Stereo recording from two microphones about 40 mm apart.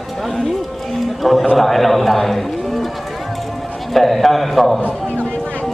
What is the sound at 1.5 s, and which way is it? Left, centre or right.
A man's voice, centre.